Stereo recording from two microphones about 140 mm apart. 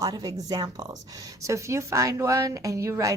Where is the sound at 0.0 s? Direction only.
25° right (ahead or behind).